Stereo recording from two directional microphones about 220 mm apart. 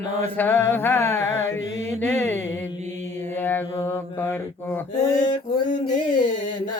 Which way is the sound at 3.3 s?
10° left (ahead or behind).